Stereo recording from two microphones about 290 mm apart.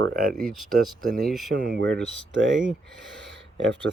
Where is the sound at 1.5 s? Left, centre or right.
Right.